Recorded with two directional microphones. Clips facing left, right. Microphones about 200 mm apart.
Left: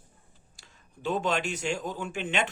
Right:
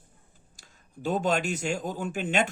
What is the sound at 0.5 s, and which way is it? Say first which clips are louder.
Speech: right 7 dB; 45° right (ahead or behind).